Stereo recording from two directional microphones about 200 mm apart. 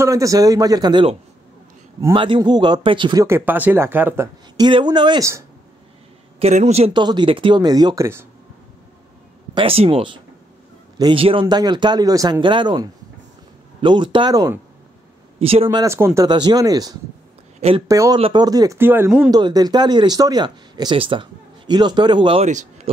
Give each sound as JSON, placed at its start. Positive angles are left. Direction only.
{"t": 0.0, "sound": "speech", "side_deg": -15}
{"t": 2.1, "sound": "speech", "side_deg": -25}
{"t": 4.6, "sound": "speech", "side_deg": -20}
{"t": 6.4, "sound": "speech", "side_deg": -35}
{"t": 9.5, "sound": "speech", "side_deg": -25}
{"t": 15.3, "sound": "speech", "side_deg": -30}
{"t": 17.6, "sound": "speech", "side_deg": -30}
{"t": 17.8, "sound": "speech", "side_deg": -15}
{"t": 19.3, "sound": "speech", "side_deg": -20}